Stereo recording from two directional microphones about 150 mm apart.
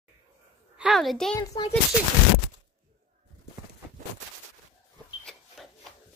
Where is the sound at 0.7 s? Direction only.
Centre (ahead or behind).